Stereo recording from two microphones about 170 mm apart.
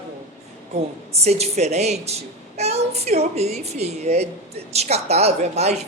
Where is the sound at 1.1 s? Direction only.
40° right (ahead or behind).